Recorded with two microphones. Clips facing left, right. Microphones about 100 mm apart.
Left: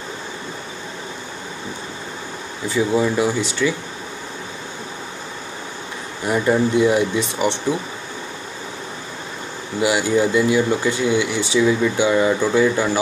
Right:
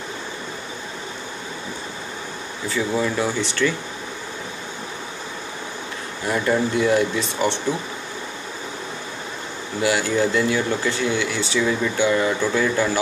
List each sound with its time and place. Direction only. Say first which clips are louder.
2.7 s speech: left 4 dB; 15° left (ahead or behind)
6.2 s speech: left 3 dB; 20° left (ahead or behind)
9.8 s speech: left 3 dB; 15° left (ahead or behind)